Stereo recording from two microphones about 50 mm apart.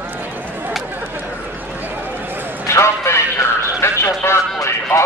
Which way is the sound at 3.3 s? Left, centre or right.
Left.